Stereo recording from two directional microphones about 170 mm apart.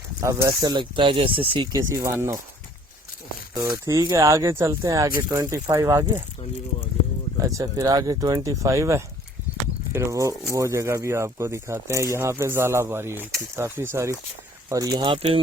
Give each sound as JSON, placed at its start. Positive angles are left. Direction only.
{"t": 0.4, "sound": "speech", "side_deg": -25}
{"t": 3.5, "sound": "speech", "side_deg": -20}
{"t": 7.4, "sound": "speech", "side_deg": -20}